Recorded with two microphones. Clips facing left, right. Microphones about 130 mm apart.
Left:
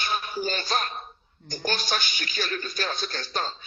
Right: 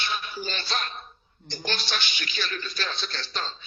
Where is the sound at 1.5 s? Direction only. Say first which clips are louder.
Left 3 dB; 45° left (ahead or behind).